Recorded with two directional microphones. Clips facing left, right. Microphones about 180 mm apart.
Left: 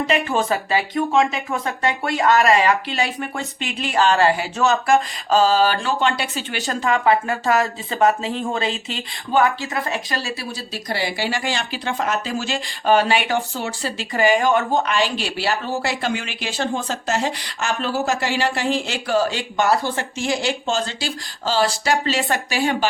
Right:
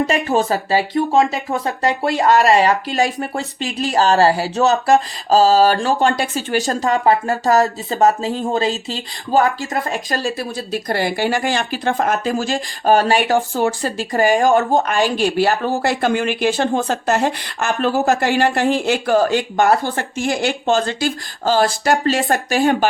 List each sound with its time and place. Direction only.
0.1 s speech: 40° right (ahead or behind)